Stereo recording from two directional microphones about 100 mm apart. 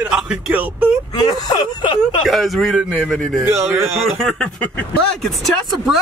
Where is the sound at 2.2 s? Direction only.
Centre (ahead or behind).